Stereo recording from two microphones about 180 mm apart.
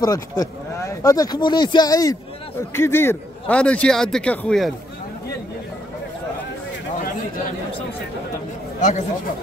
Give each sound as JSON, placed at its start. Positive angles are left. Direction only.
{"t": 0.0, "sound": "a man's voice", "side_deg": 20}